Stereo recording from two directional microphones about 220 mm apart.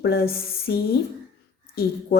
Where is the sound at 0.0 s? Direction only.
45° left (ahead or behind).